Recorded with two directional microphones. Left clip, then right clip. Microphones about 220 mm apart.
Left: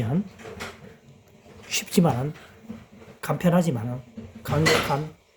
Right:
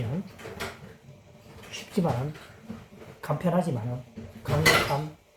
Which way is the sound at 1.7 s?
50° left (ahead or behind).